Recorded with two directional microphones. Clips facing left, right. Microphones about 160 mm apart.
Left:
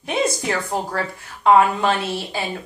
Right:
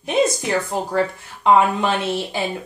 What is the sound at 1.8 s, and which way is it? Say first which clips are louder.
Speech: even; 20° right (ahead or behind).